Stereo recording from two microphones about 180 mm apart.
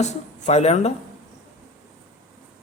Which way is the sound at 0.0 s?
40° left (ahead or behind).